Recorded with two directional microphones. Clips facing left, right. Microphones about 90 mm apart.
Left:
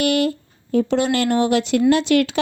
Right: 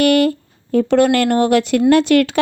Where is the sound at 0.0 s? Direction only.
55° right (ahead or behind).